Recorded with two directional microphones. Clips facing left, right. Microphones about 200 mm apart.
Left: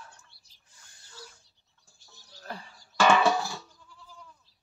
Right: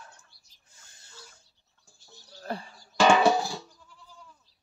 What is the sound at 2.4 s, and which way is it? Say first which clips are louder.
Music: right 6 dB; 35° right (ahead or behind).